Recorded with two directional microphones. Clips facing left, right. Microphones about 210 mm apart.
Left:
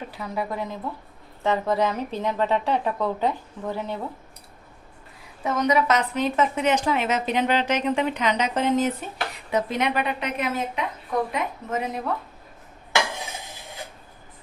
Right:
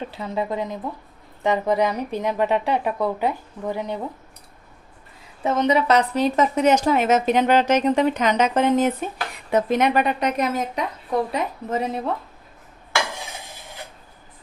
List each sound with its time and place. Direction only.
0.1 s a woman's voice: 25° right (ahead or behind)
5.4 s a woman's voice: 30° right (ahead or behind)